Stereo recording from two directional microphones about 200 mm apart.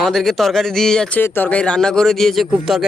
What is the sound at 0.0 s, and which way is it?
Speech, centre (ahead or behind).